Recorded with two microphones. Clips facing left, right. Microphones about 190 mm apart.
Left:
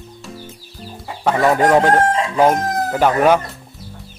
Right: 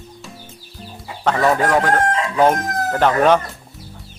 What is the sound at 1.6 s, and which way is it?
Chicken, 25° left (ahead or behind).